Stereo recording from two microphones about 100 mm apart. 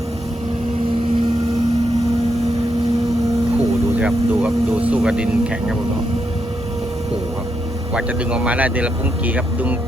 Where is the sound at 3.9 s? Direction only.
10° right (ahead or behind).